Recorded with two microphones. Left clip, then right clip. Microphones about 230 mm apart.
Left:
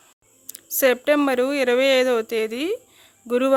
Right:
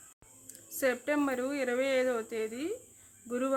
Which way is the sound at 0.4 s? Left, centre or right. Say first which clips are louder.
Left 12 dB; left.